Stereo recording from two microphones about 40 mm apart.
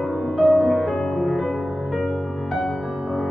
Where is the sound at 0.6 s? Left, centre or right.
Centre.